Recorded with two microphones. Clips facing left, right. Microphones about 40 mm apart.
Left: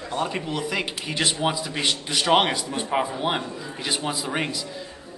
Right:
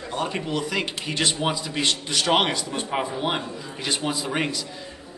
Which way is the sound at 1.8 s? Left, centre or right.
Centre.